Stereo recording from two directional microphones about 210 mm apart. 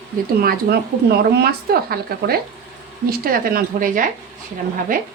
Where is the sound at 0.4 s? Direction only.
45° right (ahead or behind).